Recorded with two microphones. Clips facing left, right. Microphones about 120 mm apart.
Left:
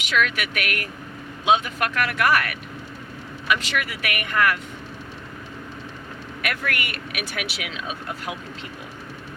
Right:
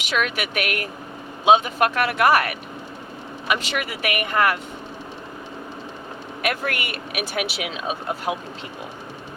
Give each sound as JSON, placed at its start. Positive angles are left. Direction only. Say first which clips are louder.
{"t": 0.0, "sound": "speech", "louder": "even", "side_deg": -25}
{"t": 6.4, "sound": "speech", "louder": "right 3 dB", "side_deg": -30}